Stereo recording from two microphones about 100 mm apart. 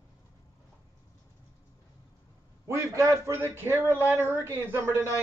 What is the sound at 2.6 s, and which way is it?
A man's voice, 30° right (ahead or behind).